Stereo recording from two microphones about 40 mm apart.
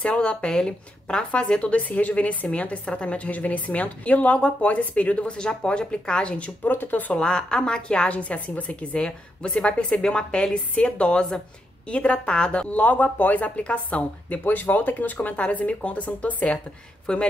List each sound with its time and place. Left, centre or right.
0.0 s a woman's voice: left
5.4 s speech: left
6.6 s speech: left
7.2 s speech: left
8.1 s a woman's voice: left
8.9 s speech: left
12.7 s a woman's voice: left
14.4 s speech: left
17.0 s speech: left